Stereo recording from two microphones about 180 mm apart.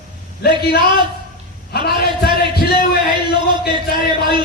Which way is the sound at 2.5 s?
60° left (ahead or behind).